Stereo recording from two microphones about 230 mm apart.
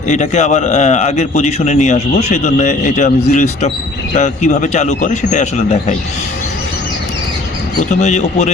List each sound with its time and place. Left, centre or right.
0.1 s a man's voice: left
7.9 s a man's voice: left